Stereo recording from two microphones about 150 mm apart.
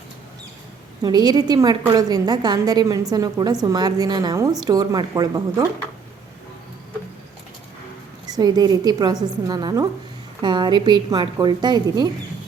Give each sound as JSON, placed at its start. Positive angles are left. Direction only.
{"t": 1.0, "sound": "a woman's voice", "side_deg": -25}
{"t": 8.3, "sound": "a woman's voice", "side_deg": -25}